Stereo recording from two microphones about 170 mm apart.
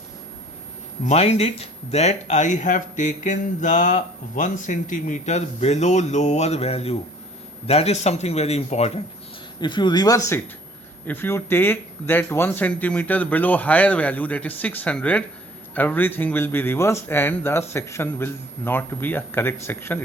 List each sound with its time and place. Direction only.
1.0 s speech: 40° left (ahead or behind)
9.6 s speech: 25° left (ahead or behind)
11.0 s a man's voice: 10° left (ahead or behind)